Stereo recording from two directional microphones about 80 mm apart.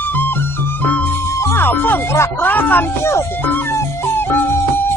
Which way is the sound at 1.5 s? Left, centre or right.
Left.